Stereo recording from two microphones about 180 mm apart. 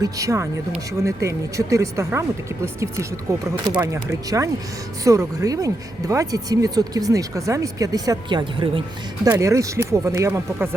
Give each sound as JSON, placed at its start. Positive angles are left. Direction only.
{"t": 0.0, "sound": "speech", "side_deg": -20}
{"t": 9.2, "sound": "speech", "side_deg": -15}